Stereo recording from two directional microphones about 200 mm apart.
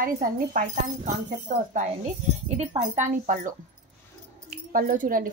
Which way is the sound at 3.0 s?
40° right (ahead or behind).